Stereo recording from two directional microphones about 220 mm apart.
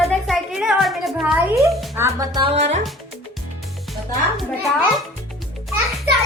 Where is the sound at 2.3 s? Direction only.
25° right (ahead or behind).